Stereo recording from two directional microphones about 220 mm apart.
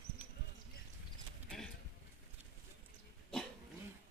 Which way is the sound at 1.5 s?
5° left (ahead or behind).